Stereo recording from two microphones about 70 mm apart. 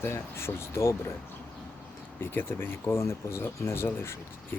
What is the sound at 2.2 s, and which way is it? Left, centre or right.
Speech, left.